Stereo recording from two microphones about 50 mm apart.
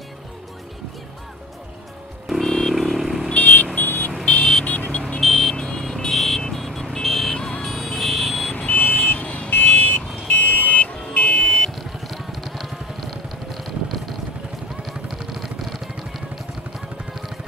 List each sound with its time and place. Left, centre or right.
2.4 s vehicle: centre
2.7 s vehicle: centre
3.3 s vehicle: left
4.3 s vehicle: left
5.2 s vehicle: centre
7.3 s music: centre
7.6 s vehicle: centre
8.5 s car alarm: left
11.0 s car alarm: left
11.8 s vehicle: centre
15.3 s vehicle: centre